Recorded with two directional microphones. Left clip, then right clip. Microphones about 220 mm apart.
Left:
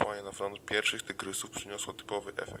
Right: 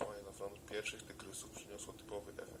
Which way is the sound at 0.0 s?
35° left (ahead or behind).